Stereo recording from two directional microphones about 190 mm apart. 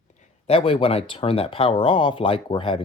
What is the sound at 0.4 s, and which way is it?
Speech, 30° left (ahead or behind).